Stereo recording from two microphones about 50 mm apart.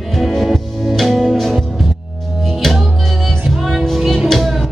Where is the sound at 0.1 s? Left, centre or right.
Centre.